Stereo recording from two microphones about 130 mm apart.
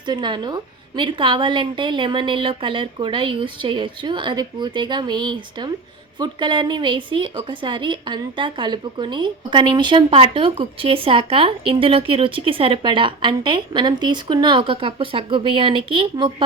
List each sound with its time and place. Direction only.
0.0 s a woman's voice: 35° right (ahead or behind)